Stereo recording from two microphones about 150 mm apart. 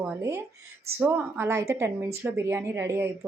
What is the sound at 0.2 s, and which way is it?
A woman's voice, 20° right (ahead or behind).